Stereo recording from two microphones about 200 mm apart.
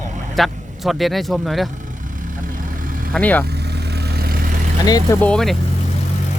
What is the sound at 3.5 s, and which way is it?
Vehicle, 55° right (ahead or behind).